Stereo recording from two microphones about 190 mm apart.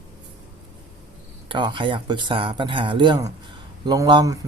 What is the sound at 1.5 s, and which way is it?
Speech, 25° right (ahead or behind).